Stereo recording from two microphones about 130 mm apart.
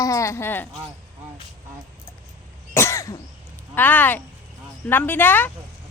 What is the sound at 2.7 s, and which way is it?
Speech, 25° left (ahead or behind).